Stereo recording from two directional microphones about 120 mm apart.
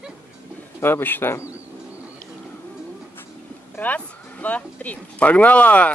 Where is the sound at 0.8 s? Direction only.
20° left (ahead or behind).